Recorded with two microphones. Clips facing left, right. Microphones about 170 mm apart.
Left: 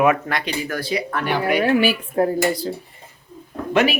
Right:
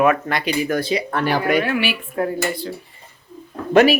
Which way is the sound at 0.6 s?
20° right (ahead or behind).